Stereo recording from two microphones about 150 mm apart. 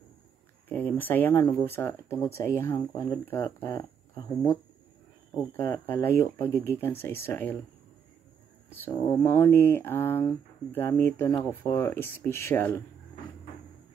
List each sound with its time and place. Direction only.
0.7 s speech: 10° left (ahead or behind)
3.3 s speech: 15° left (ahead or behind)
5.6 s speech: 15° left (ahead or behind)
8.6 s speech: 15° left (ahead or behind)